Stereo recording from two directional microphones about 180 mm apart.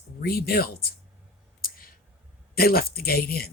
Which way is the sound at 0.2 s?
60° left (ahead or behind).